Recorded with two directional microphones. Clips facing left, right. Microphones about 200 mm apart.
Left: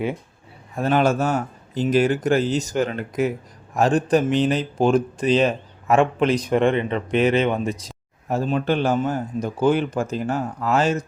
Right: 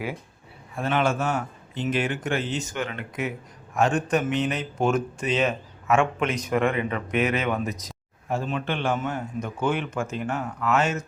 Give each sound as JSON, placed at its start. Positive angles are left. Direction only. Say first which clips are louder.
{"t": 0.8, "sound": "speech", "louder": "left 5 dB", "side_deg": 40}